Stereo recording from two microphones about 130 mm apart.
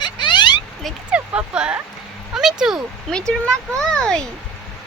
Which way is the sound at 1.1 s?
10° right (ahead or behind).